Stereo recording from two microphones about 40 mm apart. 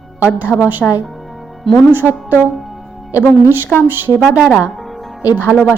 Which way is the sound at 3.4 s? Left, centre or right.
Right.